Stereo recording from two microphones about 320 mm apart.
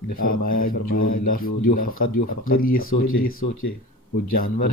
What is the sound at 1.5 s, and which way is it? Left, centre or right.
Speech, left.